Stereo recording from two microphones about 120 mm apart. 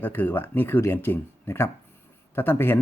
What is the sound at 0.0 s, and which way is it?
Speech, 15° left (ahead or behind).